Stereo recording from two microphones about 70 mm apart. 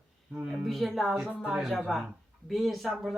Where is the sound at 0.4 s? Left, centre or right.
Centre.